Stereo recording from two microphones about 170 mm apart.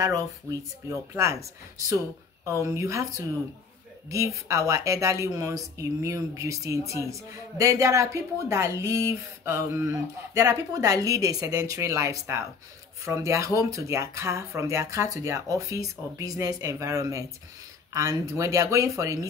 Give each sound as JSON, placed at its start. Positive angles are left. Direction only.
{"t": 0.0, "sound": "a woman's voice", "side_deg": -20}